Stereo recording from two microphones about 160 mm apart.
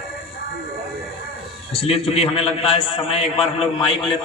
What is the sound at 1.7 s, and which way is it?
A man's voice, 35° left (ahead or behind).